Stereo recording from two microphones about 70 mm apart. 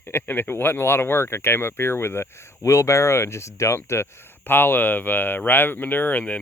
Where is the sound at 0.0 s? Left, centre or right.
Left.